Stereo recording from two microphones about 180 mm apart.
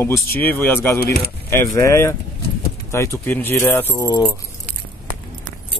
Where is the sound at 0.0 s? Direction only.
15° left (ahead or behind).